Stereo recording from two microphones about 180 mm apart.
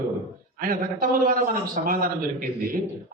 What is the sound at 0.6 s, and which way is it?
A man's voice, 50° right (ahead or behind).